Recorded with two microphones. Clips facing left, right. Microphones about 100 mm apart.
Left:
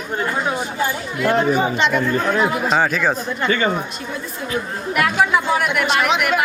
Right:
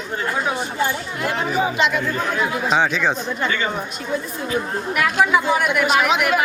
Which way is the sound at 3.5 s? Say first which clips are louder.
Left 6 dB; 45° left (ahead or behind).